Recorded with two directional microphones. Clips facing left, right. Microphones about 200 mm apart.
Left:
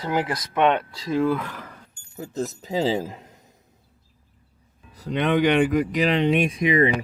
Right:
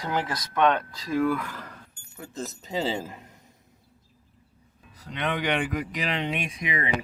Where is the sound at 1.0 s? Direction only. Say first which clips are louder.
Left 3 dB; 25° left (ahead or behind).